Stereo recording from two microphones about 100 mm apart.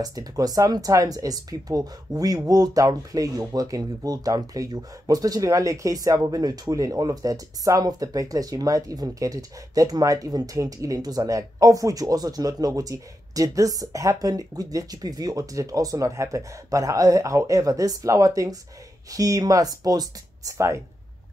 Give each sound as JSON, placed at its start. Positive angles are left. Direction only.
{"t": 0.0, "sound": "speech", "side_deg": -40}